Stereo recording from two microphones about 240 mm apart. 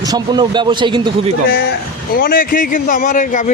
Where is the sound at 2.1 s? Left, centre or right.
Left.